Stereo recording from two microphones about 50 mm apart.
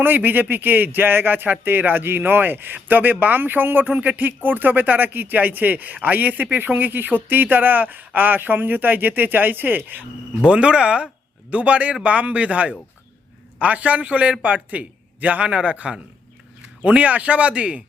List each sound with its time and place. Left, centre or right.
0.0 s speech: right
10.4 s a man's voice: right